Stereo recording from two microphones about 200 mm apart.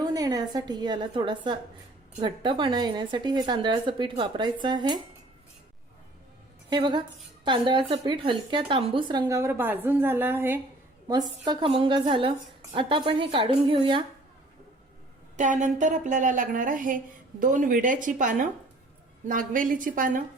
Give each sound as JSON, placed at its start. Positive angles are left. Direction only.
{"t": 0.0, "sound": "a woman's voice", "side_deg": -20}
{"t": 6.7, "sound": "a woman's voice", "side_deg": -25}
{"t": 11.4, "sound": "a woman's voice", "side_deg": -25}
{"t": 15.4, "sound": "a woman's voice", "side_deg": -40}